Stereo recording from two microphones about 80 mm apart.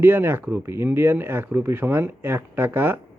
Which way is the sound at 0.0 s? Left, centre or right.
Right.